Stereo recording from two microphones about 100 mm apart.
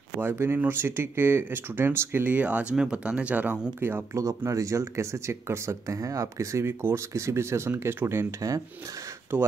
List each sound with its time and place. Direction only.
0.2 s speech: 25° right (ahead or behind)
9.3 s speech: 20° right (ahead or behind)